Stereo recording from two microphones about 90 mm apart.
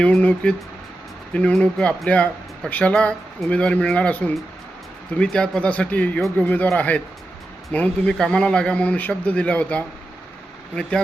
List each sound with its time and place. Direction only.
0.0 s speech: 15° left (ahead or behind)